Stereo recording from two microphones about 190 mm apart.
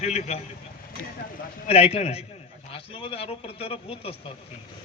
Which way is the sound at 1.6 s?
30° left (ahead or behind).